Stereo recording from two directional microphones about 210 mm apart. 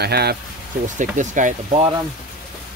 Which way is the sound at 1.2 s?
35° right (ahead or behind).